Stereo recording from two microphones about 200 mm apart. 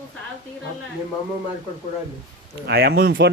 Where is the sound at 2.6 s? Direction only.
50° right (ahead or behind).